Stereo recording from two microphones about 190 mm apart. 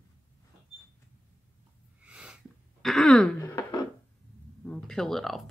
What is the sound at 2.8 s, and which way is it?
Throat clearing, 5° left (ahead or behind).